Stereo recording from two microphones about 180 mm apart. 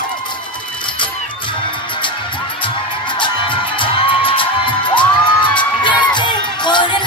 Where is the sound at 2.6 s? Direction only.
25° left (ahead or behind).